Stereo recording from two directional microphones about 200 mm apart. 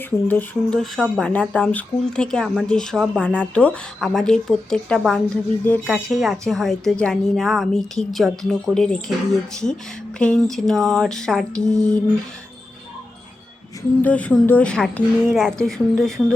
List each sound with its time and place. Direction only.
0.3 s speech: 5° left (ahead or behind)
11.7 s a sound: 40° left (ahead or behind)
14.0 s speech: 5° left (ahead or behind)